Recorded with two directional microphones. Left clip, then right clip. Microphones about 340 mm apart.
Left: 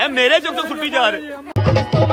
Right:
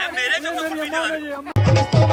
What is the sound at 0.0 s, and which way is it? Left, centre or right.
Speech, centre.